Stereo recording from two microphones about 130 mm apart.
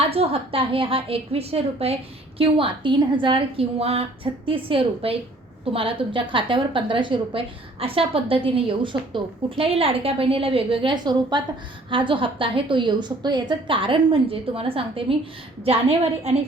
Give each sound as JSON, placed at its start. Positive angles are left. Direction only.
{"t": 0.1, "sound": "a woman's voice", "side_deg": -50}